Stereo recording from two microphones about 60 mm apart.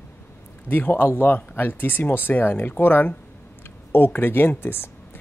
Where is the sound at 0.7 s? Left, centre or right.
Left.